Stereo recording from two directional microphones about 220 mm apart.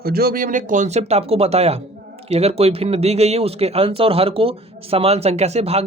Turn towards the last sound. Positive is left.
turn(degrees=-25)  # may be behind; listen again after turning